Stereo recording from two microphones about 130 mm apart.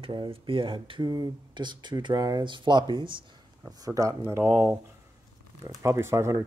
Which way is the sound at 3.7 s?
25° right (ahead or behind).